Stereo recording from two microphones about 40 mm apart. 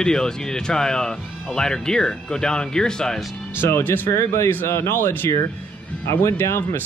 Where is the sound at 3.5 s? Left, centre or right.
Left.